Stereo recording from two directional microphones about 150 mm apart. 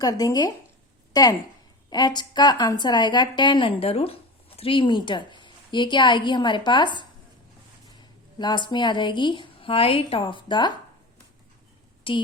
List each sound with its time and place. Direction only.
0.0 s a woman's voice: 25° left (ahead or behind)
12.1 s a woman's voice: 35° left (ahead or behind)